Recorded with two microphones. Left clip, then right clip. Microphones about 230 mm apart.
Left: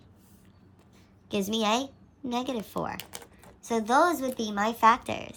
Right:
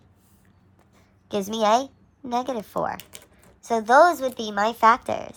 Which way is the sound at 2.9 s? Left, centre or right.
Centre.